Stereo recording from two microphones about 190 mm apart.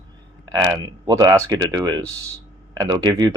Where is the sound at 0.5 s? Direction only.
20° right (ahead or behind).